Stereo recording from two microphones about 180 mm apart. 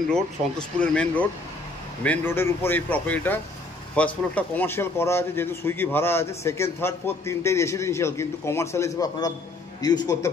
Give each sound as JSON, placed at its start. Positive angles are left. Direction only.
{"t": 0.7, "sound": "a man's voice", "side_deg": 5}